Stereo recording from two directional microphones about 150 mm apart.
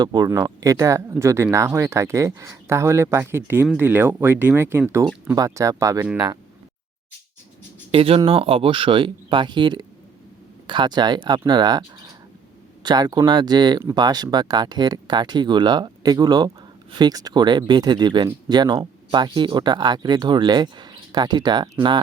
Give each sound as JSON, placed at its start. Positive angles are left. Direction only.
{"t": 0.0, "sound": "speech", "side_deg": -25}
{"t": 7.9, "sound": "speech", "side_deg": -40}